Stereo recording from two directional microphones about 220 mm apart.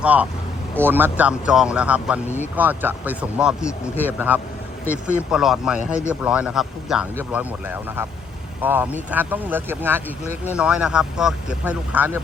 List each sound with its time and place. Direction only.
0.0 s a man's voice: 5° right (ahead or behind)